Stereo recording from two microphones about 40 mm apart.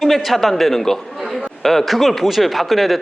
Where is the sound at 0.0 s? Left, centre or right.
Centre.